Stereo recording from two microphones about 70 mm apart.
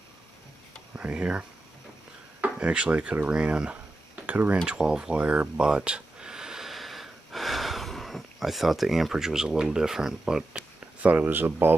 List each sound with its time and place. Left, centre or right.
0.9 s speech: centre
2.4 s speech: centre
5.7 s gasp: centre
11.1 s speech: right